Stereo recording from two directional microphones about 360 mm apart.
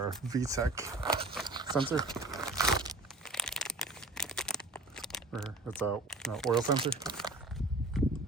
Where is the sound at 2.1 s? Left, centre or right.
Centre.